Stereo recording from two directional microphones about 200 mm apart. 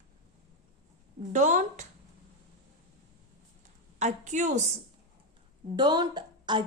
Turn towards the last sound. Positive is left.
turn(degrees=-20)  # may be behind; listen again after turning